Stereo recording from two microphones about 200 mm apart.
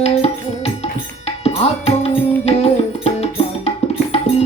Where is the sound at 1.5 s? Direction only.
30° left (ahead or behind).